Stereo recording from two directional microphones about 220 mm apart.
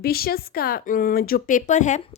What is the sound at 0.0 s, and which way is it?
Speech, 45° left (ahead or behind).